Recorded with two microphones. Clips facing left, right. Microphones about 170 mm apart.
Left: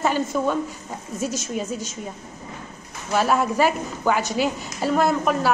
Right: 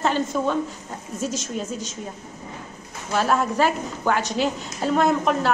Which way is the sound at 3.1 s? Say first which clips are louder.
Left 1 dB; 10° left (ahead or behind).